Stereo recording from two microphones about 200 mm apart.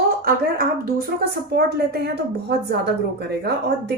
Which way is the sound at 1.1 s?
50° right (ahead or behind).